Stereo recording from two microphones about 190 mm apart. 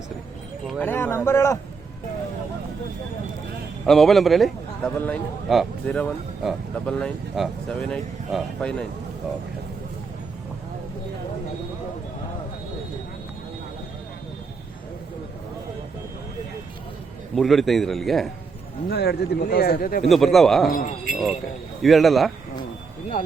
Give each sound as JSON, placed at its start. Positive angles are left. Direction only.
{"t": 0.7, "sound": "a sound", "side_deg": 10}
{"t": 3.8, "sound": "a man's voice", "side_deg": 0}
{"t": 17.3, "sound": "a man's voice", "side_deg": 0}
{"t": 18.9, "sound": "speech", "side_deg": 60}
{"t": 20.1, "sound": "a man's voice", "side_deg": 0}
{"t": 20.7, "sound": "speech", "side_deg": 45}
{"t": 21.8, "sound": "a man's voice", "side_deg": 0}